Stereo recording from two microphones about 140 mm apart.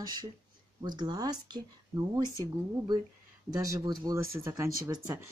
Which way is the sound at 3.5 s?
25° right (ahead or behind).